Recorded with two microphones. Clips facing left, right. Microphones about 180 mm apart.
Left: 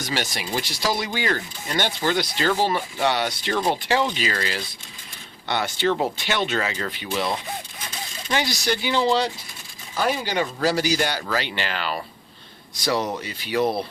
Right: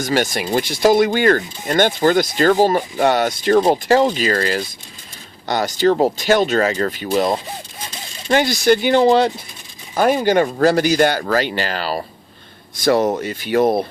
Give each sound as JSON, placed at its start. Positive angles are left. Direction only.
{"t": 0.0, "sound": "speech", "side_deg": -50}
{"t": 12.7, "sound": "speech", "side_deg": -50}